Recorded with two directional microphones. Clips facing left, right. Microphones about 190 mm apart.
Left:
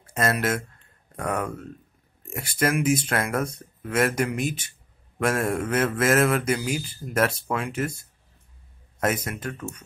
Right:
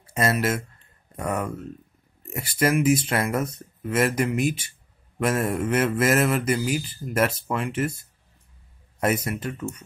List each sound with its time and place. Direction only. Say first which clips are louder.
0.1 s speech: right 1 dB; 5° right (ahead or behind)
9.0 s speech: right 2 dB; 5° right (ahead or behind)